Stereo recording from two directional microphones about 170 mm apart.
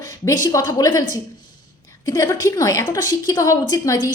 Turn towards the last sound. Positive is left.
turn(degrees=20)  # may be behind; listen again after turning